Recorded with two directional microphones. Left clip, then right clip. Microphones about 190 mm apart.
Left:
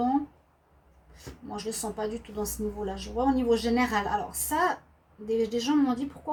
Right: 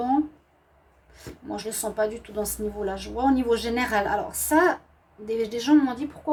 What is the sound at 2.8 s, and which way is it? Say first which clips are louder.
A woman's voice: right 4 dB; 40° right (ahead or behind).